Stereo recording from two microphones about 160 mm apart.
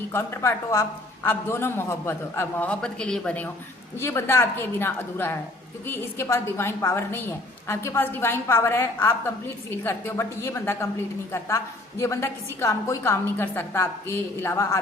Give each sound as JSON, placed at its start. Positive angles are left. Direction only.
{"t": 0.1, "sound": "a woman's voice", "side_deg": 15}